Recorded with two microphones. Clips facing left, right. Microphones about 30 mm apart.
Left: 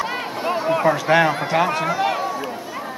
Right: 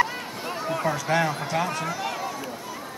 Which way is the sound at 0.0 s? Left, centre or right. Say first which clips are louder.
Left 3 dB; left.